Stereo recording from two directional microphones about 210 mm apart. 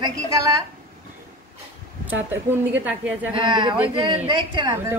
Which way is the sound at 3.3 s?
20° right (ahead or behind).